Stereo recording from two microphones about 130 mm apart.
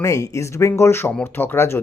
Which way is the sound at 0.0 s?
25° left (ahead or behind).